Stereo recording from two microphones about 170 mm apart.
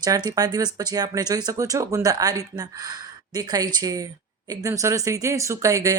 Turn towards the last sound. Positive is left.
turn(degrees=-20)  # may be behind; listen again after turning